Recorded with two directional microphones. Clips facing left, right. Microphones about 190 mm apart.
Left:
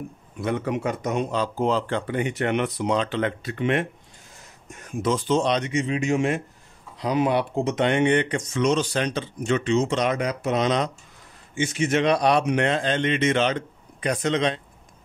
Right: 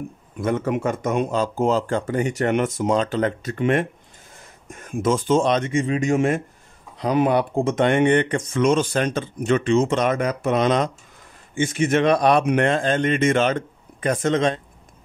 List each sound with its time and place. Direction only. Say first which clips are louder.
0.4 s speech: right 3 dB; 45° right (ahead or behind)